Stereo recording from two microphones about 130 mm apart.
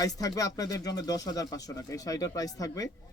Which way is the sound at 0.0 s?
30° left (ahead or behind).